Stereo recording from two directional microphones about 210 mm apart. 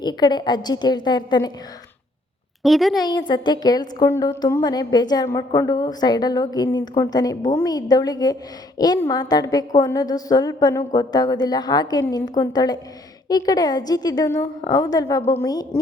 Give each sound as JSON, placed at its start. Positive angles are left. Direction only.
{"t": 0.0, "sound": "a woman's voice", "side_deg": 20}
{"t": 2.6, "sound": "a woman's voice", "side_deg": 0}
{"t": 3.0, "sound": "a woman's voice", "side_deg": 20}